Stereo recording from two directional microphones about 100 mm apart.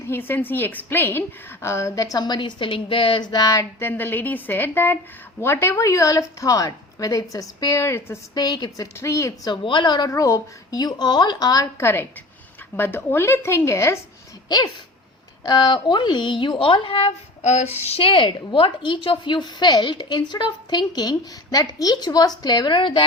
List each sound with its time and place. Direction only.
0.1 s a woman's voice: 20° left (ahead or behind)
8.4 s a woman's voice: 45° left (ahead or behind)
9.0 s a woman's voice: 30° left (ahead or behind)
9.5 s a woman's voice: 50° left (ahead or behind)
10.1 s a woman's voice: 30° left (ahead or behind)
11.8 s speech: 20° left (ahead or behind)
15.4 s a woman's voice: 45° left (ahead or behind); by 17.1 s 65° left (ahead or behind)
17.8 s a woman's voice: 80° left; by 23.0 s 50° left (ahead or behind)